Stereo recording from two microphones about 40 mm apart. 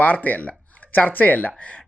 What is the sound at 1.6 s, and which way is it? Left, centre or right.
Speech, left.